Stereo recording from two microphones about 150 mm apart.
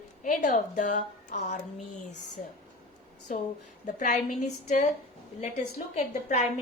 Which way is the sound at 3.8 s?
55° left (ahead or behind).